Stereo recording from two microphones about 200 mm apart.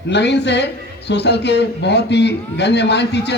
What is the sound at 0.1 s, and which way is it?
A man's voice, 60° left (ahead or behind).